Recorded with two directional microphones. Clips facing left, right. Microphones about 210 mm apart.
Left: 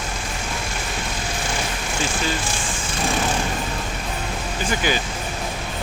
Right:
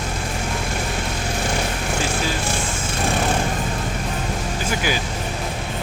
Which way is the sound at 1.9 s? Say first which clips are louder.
Even; 60° right (ahead or behind).